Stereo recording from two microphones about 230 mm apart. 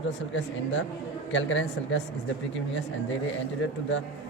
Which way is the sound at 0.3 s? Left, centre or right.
Left.